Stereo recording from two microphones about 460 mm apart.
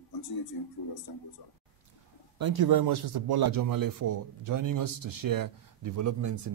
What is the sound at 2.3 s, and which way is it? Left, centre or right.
A man's voice, right.